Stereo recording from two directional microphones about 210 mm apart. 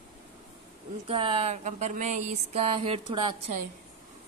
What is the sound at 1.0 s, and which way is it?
Speech, 25° right (ahead or behind).